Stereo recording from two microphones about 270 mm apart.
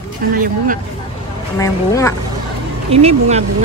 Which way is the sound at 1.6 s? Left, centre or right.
Centre.